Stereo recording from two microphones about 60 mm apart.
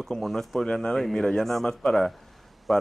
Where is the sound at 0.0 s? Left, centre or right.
Centre.